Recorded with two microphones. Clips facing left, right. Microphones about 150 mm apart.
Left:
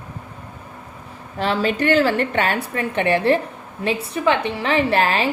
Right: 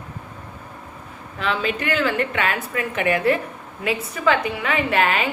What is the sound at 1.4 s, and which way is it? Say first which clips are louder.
A woman's voice: left 4 dB; 35° left (ahead or behind).